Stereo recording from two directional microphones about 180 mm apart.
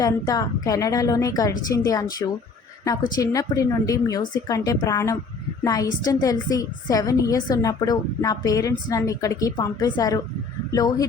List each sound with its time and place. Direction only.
0.0 s a woman's voice: 20° left (ahead or behind)